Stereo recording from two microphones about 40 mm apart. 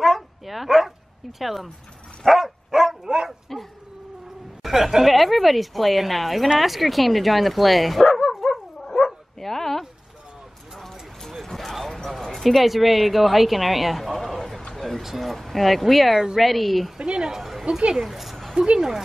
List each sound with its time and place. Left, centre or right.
0.0 s bow-wow: centre
1.4 s a woman's voice: centre
2.2 s dog: centre
4.6 s a woman's voice: centre
8.4 s dog: centre
9.4 s a sound: centre
10.8 s clip-clop: centre
14.7 s a woman's voice: centre
17.0 s a sound: centre
17.4 s a sound: centre
17.6 s speech: right
17.9 s a sound: centre